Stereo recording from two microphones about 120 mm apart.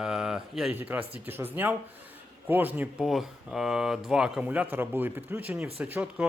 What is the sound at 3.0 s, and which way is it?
Speech, 5° right (ahead or behind).